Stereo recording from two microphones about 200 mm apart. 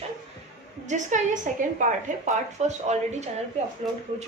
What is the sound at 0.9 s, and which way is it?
Speech, 35° right (ahead or behind).